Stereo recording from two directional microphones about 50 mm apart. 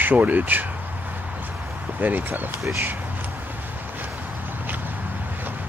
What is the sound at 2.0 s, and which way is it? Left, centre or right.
Speech, right.